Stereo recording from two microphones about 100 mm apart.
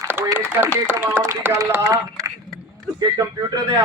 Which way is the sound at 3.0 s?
40° right (ahead or behind).